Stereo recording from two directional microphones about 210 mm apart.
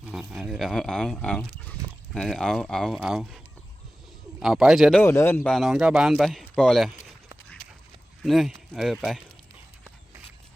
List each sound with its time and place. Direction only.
0.0 s speech: 5° right (ahead or behind)
5.0 s speech: 10° left (ahead or behind)
8.2 s speech: centre (ahead or behind)